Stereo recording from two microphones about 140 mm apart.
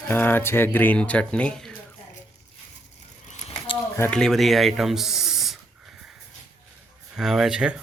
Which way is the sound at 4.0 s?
5° left (ahead or behind).